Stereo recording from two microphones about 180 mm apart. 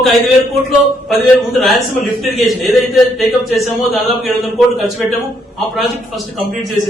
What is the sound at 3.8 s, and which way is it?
Speech, centre (ahead or behind).